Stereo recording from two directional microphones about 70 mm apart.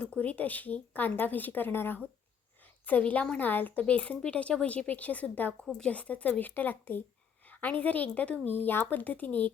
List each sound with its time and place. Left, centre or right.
0.0 s speech: centre
5.6 s speech: centre